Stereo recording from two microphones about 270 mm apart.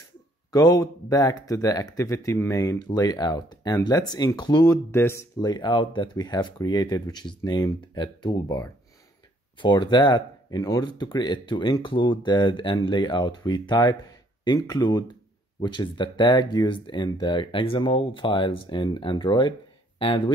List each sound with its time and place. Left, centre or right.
0.5 s speech: centre